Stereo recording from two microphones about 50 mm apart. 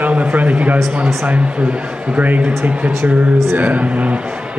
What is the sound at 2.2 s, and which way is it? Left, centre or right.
A man's voice, right.